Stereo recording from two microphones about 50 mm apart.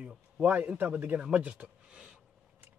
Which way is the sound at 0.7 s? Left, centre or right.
Right.